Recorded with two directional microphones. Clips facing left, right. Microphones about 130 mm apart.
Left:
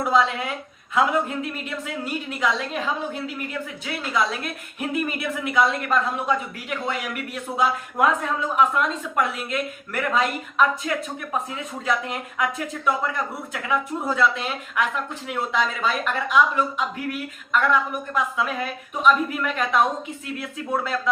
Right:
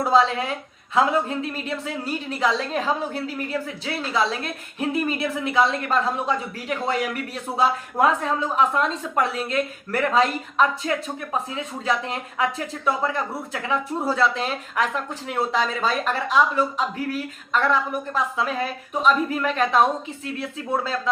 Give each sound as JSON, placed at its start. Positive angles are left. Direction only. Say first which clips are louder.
{"t": 0.0, "sound": "a woman's voice", "louder": "right 2 dB", "side_deg": -30}